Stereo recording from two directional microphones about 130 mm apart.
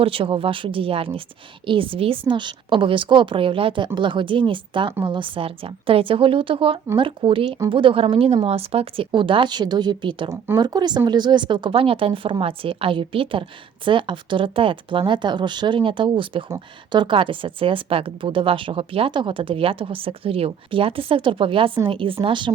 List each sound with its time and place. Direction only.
0.0 s a woman's voice: 45° right (ahead or behind)
10.2 s a woman's voice: 20° right (ahead or behind)
10.6 s a woman's voice: 35° right (ahead or behind)